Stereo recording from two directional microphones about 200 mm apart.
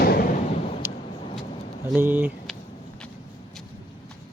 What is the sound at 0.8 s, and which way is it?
Vehicle, 10° right (ahead or behind).